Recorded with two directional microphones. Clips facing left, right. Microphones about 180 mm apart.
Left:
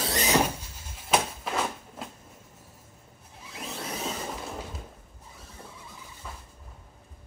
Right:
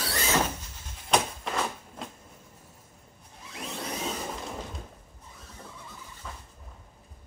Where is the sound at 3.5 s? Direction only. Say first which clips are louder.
Right 1 dB; centre (ahead or behind).